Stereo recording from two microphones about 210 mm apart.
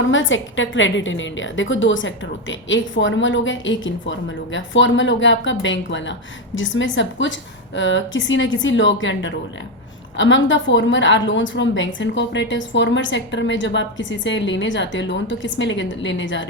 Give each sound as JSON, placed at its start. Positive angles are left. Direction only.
{"t": 0.0, "sound": "a woman's voice", "side_deg": 65}